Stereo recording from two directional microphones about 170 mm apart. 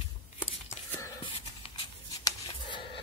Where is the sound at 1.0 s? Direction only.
30° left (ahead or behind).